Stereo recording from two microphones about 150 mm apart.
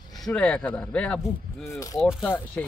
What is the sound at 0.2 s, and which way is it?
Speech, 5° left (ahead or behind).